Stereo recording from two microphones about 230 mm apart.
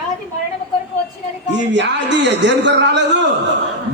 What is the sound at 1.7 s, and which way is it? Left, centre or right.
A man's voice, right.